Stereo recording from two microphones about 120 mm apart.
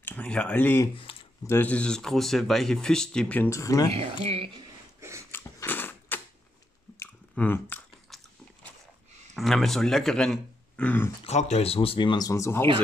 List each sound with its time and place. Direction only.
0.0 s speech: 10° left (ahead or behind)
3.4 s speech: 25° left (ahead or behind)
3.9 s speech: 55° right (ahead or behind)
5.3 s a sound: 15° left (ahead or behind)
7.0 s chewing: 15° left (ahead or behind)
8.1 s biting: centre (ahead or behind)
9.3 s speech: centre (ahead or behind)
11.2 s speech: 65° left (ahead or behind); by 12.3 s 40° left (ahead or behind)
12.3 s speech: 25° left (ahead or behind)